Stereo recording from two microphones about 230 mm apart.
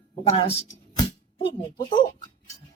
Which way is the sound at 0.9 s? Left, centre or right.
Left.